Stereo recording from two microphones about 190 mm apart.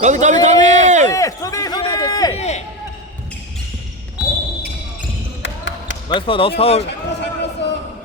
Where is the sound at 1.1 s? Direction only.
15° left (ahead or behind).